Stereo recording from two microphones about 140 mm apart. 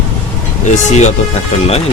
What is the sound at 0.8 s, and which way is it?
Speech, 55° left (ahead or behind).